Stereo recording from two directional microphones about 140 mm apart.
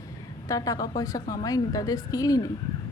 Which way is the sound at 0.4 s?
25° left (ahead or behind).